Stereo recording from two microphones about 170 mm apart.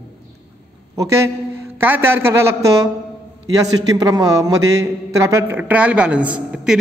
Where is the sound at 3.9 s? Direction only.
20° right (ahead or behind).